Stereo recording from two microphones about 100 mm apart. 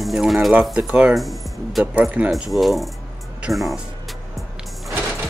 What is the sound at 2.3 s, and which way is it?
Speech, centre (ahead or behind).